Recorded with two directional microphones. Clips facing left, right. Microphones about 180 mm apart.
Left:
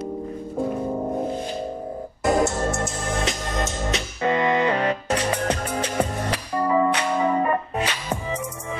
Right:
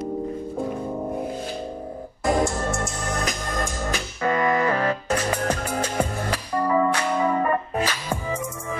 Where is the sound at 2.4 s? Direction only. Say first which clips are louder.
Left 2 dB; 25° left (ahead or behind).